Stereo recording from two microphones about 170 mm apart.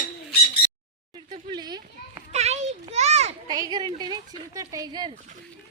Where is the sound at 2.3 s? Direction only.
40° right (ahead or behind).